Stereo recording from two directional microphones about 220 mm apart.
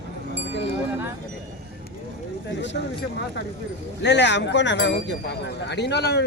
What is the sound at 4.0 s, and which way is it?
Speech, 50° left (ahead or behind).